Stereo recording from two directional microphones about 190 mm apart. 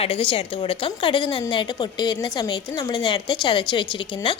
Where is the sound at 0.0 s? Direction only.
30° left (ahead or behind).